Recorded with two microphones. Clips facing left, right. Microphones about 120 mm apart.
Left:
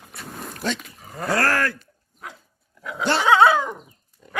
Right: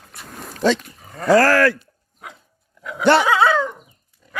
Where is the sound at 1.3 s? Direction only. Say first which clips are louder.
Right 8 dB; 90° right.